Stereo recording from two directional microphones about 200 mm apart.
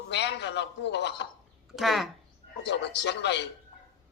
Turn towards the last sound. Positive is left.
turn(degrees=60)  # may be behind; listen again after turning